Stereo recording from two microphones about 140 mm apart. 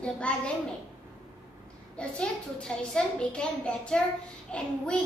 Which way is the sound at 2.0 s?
5° left (ahead or behind).